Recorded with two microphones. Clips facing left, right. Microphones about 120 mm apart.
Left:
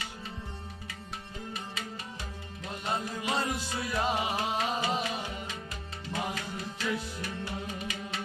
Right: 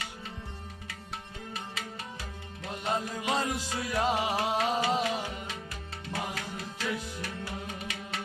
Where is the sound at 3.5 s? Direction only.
90° right.